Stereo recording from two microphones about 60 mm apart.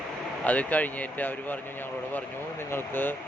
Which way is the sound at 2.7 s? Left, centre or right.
Left.